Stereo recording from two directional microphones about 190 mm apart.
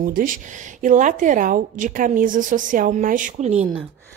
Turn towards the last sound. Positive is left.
turn(degrees=-35)  # may be behind; listen again after turning